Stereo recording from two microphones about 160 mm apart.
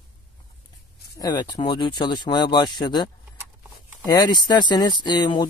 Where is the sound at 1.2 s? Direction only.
25° left (ahead or behind).